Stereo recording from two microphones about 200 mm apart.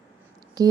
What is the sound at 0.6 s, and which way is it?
Speech, 15° right (ahead or behind).